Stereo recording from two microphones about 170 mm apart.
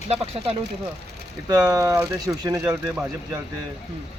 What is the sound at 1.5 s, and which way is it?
Speech, 20° right (ahead or behind).